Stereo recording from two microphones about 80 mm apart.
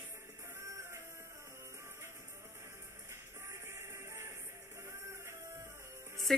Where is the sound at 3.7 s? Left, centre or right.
Right.